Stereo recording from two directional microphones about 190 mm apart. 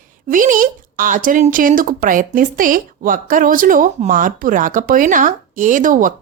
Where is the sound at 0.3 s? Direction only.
45° right (ahead or behind).